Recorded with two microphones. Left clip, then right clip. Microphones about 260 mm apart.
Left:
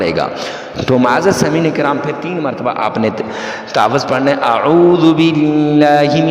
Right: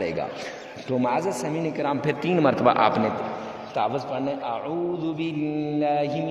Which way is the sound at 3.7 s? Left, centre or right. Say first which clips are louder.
Left 13 dB; left.